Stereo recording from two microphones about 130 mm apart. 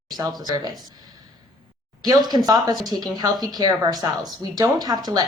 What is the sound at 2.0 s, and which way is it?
Speech, 30° right (ahead or behind).